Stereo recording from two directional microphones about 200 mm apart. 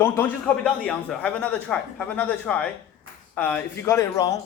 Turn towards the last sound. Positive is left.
turn(degrees=15)  # may be behind; listen again after turning